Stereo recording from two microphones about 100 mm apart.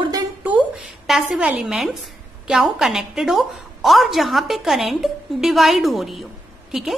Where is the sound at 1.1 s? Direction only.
10° right (ahead or behind).